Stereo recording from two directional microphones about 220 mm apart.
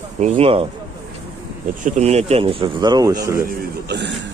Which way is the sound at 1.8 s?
30° right (ahead or behind).